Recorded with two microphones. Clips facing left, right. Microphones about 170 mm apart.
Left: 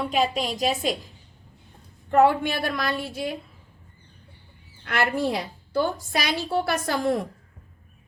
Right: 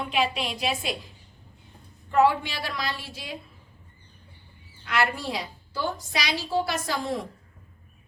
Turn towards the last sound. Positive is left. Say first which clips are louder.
# left 5 dB
turn(degrees=55)  # may be behind; listen again after turning